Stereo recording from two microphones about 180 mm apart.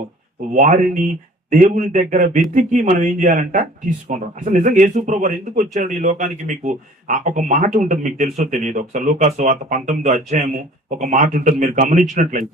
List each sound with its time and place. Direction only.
0.5 s speech: 45° right (ahead or behind)